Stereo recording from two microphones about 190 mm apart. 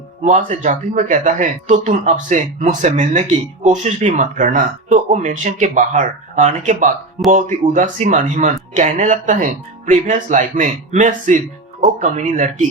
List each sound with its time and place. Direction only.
0.3 s speech: 40° right (ahead or behind)